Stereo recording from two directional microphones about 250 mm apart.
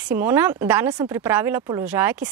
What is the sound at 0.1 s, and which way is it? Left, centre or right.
Speech, centre.